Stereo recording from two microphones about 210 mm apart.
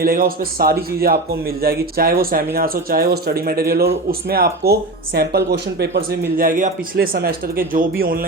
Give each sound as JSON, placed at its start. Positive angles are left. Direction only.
{"t": 0.0, "sound": "speech", "side_deg": -45}